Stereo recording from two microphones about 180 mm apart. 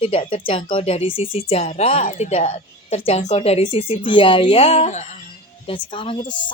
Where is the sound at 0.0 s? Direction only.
30° left (ahead or behind).